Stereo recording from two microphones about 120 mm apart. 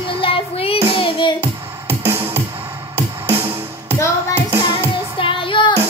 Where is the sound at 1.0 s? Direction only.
45° left (ahead or behind).